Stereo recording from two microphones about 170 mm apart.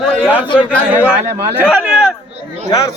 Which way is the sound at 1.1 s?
10° right (ahead or behind).